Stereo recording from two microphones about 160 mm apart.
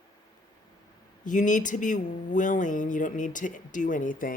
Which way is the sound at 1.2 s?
55° left (ahead or behind).